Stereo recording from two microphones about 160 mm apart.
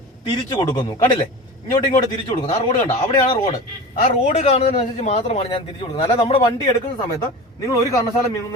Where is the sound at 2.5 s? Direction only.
40° left (ahead or behind).